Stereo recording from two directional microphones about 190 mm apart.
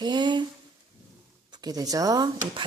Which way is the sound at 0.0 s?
20° right (ahead or behind).